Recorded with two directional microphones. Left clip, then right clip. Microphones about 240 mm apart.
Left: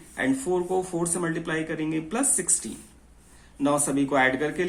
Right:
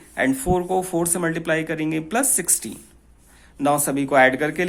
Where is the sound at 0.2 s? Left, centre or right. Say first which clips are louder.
Right 5 dB; right.